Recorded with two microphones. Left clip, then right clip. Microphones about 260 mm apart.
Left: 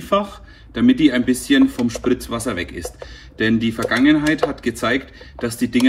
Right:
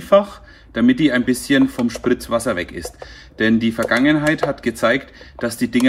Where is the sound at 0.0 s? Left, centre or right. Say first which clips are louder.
Right 5 dB; right.